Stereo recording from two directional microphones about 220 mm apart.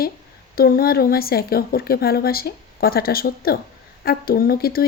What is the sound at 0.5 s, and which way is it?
Speech, 40° left (ahead or behind).